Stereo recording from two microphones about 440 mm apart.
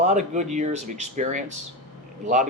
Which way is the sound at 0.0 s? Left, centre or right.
Centre.